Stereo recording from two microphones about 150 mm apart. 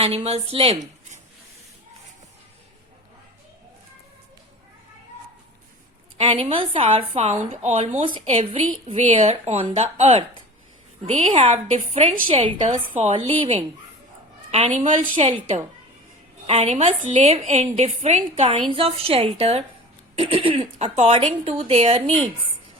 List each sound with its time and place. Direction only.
0.0 s a woman's voice: 45° right (ahead or behind)
6.1 s a woman's voice: 40° right (ahead or behind)